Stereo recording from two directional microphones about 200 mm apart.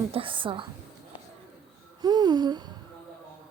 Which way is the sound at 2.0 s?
20° right (ahead or behind).